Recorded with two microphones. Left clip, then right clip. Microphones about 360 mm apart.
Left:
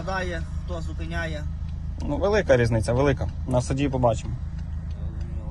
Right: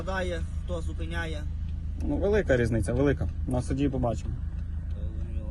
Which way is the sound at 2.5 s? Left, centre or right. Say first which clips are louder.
Left 6 dB; left.